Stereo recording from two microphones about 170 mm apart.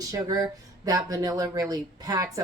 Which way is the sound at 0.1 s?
20° right (ahead or behind).